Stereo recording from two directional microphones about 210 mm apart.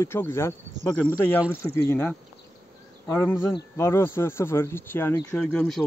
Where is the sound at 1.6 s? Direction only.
10° left (ahead or behind).